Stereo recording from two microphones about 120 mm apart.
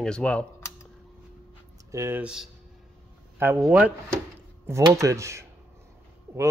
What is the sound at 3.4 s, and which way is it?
Speech, 20° right (ahead or behind).